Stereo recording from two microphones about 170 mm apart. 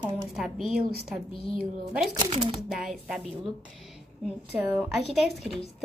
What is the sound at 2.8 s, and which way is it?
Speech, 5° right (ahead or behind).